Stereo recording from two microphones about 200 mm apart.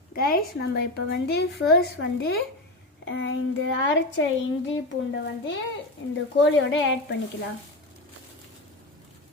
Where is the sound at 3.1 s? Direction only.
65° left (ahead or behind).